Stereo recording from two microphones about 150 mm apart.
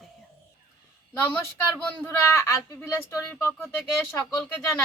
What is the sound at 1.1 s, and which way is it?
Speech, 15° left (ahead or behind).